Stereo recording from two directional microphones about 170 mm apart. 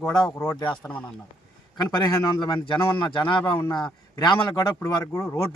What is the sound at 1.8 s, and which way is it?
A man's voice, 20° left (ahead or behind).